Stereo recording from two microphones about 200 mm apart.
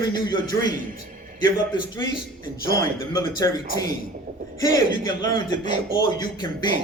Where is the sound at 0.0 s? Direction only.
20° left (ahead or behind).